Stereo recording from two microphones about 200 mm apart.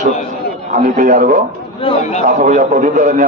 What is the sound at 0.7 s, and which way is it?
A man's voice, 40° right (ahead or behind).